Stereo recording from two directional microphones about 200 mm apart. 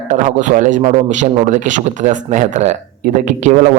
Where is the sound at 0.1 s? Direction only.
40° right (ahead or behind).